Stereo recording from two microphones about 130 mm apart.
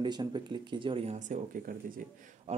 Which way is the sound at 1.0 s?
70° right (ahead or behind).